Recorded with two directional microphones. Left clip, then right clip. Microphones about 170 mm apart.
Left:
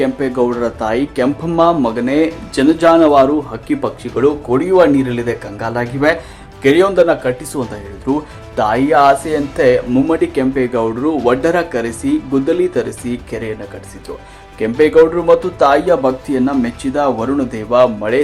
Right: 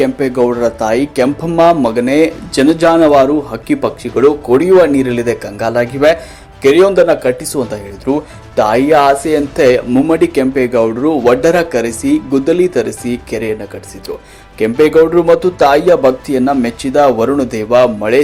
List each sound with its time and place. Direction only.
0.0 s speech: 10° right (ahead or behind)
14.6 s speech: 15° right (ahead or behind)